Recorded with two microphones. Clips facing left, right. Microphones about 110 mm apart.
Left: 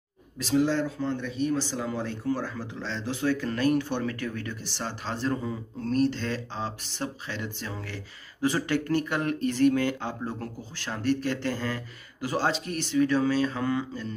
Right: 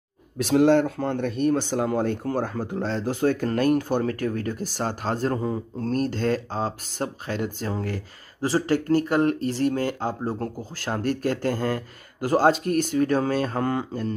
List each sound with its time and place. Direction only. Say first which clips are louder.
0.4 s speech: right 7 dB; 60° right (ahead or behind)